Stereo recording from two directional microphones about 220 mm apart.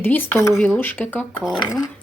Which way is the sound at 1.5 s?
20° left (ahead or behind).